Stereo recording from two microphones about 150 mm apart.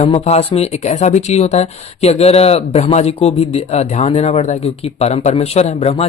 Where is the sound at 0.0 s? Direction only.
45° left (ahead or behind).